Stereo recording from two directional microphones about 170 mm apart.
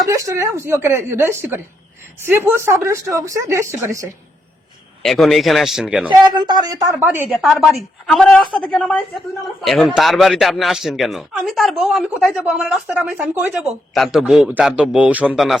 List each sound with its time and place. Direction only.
0.0 s speech: 20° right (ahead or behind)
5.0 s speech: centre (ahead or behind)
6.1 s speech: 25° right (ahead or behind)
7.3 s speech: centre (ahead or behind)